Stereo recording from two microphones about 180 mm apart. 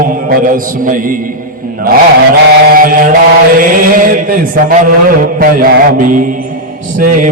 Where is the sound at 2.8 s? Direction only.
50° right (ahead or behind).